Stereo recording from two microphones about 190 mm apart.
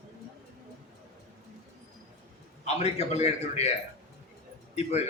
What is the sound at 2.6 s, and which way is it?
A man's voice, 35° left (ahead or behind).